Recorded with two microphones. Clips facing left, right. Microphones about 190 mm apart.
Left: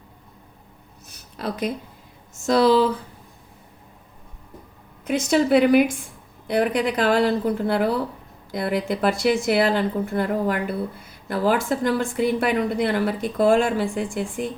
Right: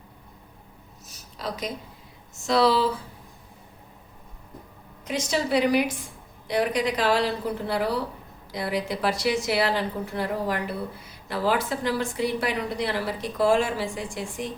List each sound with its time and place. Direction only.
1.1 s a sound: 55° left (ahead or behind)
2.5 s a woman's voice: 45° left (ahead or behind)
5.0 s a woman's voice: 55° left (ahead or behind)